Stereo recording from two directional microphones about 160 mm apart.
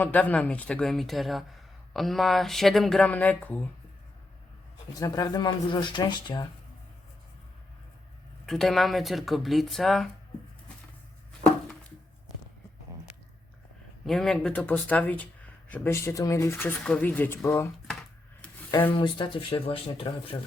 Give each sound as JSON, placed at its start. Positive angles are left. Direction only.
{"t": 0.0, "sound": "speech", "side_deg": 10}
{"t": 4.9, "sound": "speech", "side_deg": 20}
{"t": 8.4, "sound": "speech", "side_deg": 0}
{"t": 14.0, "sound": "speech", "side_deg": 0}
{"t": 18.7, "sound": "speech", "side_deg": 15}
{"t": 18.9, "sound": "speech", "side_deg": 30}